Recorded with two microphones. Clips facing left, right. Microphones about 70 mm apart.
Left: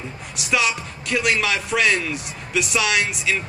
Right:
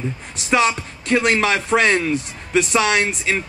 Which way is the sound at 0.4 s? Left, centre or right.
Right.